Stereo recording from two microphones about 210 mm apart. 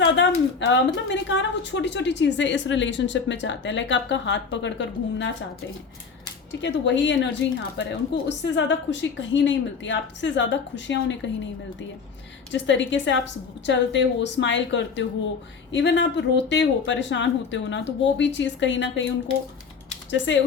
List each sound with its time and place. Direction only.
0.2 s a woman's voice: 60° left (ahead or behind)
6.5 s a woman's voice: 60° left (ahead or behind)
12.5 s a woman's voice: 60° left (ahead or behind)
20.1 s a woman's voice: 60° left (ahead or behind)